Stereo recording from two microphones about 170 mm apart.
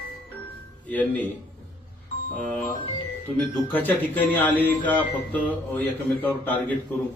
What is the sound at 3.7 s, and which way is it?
A man's voice, 10° left (ahead or behind).